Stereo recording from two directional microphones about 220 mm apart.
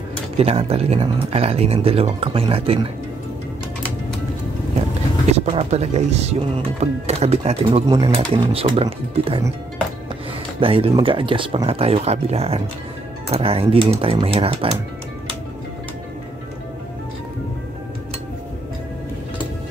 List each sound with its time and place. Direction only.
0.4 s speech: 25° right (ahead or behind)
5.3 s speech: 30° right (ahead or behind)
10.6 s speech: 25° right (ahead or behind)